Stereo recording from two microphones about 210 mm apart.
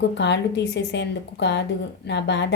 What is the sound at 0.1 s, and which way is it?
A woman's voice, 55° left (ahead or behind).